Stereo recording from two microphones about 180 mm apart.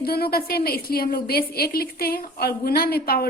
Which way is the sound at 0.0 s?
60° left (ahead or behind).